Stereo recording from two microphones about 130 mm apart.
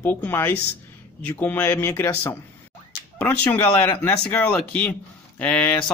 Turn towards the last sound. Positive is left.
turn(degrees=10)  # may be behind; listen again after turning